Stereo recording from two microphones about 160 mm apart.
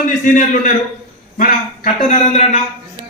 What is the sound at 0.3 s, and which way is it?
Speech, 55° left (ahead or behind).